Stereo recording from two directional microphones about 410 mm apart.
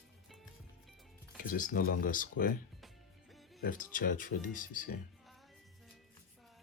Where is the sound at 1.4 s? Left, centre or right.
Centre.